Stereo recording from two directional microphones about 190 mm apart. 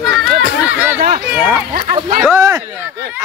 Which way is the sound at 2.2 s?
10° right (ahead or behind).